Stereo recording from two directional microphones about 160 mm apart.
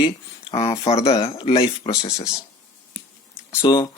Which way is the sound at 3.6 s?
30° left (ahead or behind).